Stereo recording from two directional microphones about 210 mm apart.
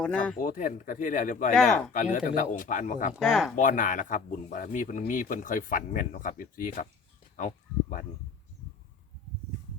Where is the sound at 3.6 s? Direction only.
40° left (ahead or behind).